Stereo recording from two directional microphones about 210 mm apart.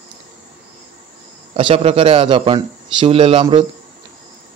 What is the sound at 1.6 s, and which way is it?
Speech, 25° right (ahead or behind).